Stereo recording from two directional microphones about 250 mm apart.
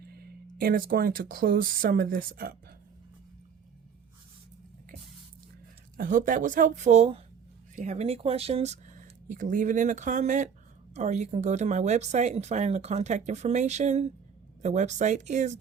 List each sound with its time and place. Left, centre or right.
0.1 s speech: right
6.0 s speech: right